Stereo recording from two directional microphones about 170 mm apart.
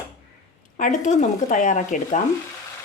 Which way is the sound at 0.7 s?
50° left (ahead or behind).